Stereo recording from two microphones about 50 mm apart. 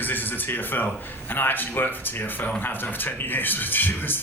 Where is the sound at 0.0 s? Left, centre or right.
Left.